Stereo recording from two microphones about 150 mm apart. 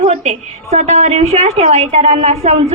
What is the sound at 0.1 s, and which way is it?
A woman's voice, 50° right (ahead or behind).